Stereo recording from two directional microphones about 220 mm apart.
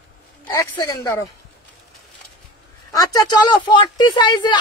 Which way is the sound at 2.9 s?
15° left (ahead or behind).